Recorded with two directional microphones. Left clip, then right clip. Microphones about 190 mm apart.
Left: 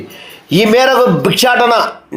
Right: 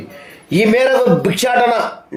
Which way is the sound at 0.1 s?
20° left (ahead or behind).